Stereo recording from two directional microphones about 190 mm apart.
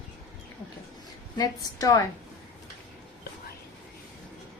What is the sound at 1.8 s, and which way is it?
Speech, 20° left (ahead or behind).